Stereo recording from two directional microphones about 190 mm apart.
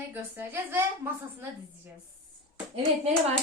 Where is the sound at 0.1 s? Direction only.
10° right (ahead or behind).